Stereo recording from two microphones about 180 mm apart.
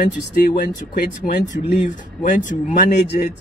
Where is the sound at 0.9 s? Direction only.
60° left (ahead or behind).